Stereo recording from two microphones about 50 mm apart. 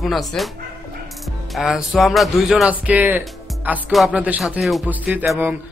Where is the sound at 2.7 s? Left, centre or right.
Right.